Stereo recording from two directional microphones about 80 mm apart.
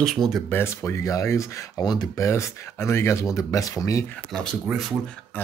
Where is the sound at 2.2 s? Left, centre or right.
Left.